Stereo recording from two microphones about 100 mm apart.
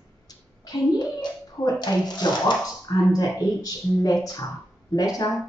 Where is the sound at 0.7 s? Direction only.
40° left (ahead or behind).